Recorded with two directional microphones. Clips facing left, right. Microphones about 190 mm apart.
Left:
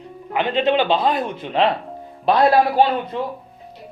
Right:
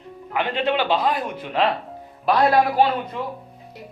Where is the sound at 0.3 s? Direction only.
20° left (ahead or behind).